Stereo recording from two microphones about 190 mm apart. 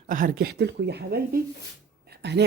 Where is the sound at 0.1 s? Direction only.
45° right (ahead or behind).